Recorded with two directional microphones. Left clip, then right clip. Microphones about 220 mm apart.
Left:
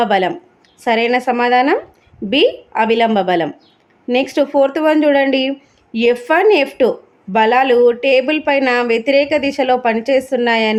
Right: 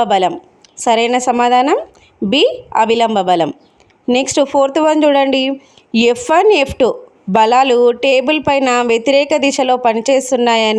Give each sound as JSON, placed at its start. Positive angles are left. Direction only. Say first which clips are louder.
{"t": 0.0, "sound": "a woman's voice", "louder": "right 2 dB", "side_deg": -25}